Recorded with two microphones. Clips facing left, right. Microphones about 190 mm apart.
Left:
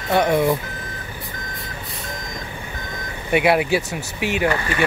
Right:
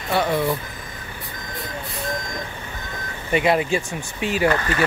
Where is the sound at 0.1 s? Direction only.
20° left (ahead or behind).